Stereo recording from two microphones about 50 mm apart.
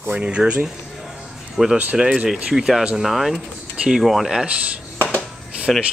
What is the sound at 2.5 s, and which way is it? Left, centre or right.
Speech, centre.